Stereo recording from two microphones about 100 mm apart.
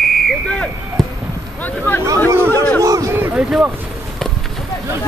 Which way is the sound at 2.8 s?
35° right (ahead or behind).